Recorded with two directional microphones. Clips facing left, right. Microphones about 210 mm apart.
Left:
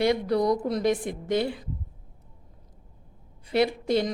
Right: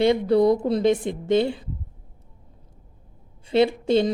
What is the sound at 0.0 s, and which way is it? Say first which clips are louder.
Speech: right 5 dB; 25° right (ahead or behind).